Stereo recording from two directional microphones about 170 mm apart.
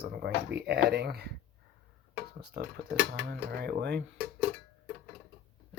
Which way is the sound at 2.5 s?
70° right (ahead or behind).